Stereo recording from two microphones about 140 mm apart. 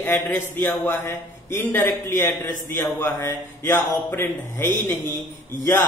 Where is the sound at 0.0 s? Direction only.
15° left (ahead or behind).